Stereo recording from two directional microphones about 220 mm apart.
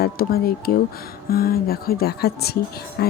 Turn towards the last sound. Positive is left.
turn(degrees=45)  # may be behind; listen again after turning